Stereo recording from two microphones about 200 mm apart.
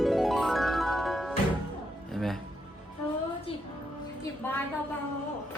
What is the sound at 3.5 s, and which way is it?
Music, 30° left (ahead or behind).